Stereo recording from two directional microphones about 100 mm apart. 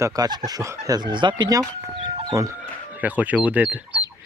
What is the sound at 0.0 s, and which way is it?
Speech, 40° right (ahead or behind).